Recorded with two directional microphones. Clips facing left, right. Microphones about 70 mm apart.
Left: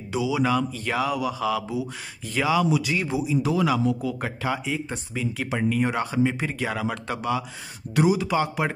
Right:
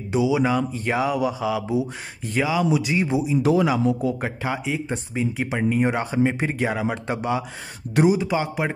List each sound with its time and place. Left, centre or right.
0.1 s speech: right
2.4 s speech: centre; by 8.2 s right
8.2 s speech: centre